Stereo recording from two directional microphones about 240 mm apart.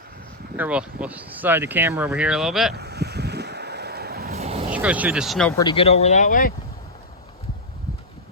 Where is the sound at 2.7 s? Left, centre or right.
Right.